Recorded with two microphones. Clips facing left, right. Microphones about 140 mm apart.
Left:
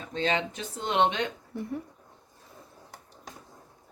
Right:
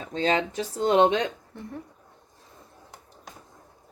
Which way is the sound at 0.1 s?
40° right (ahead or behind).